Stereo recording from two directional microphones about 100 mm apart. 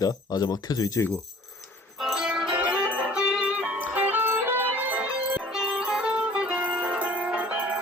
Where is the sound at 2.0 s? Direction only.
5° right (ahead or behind).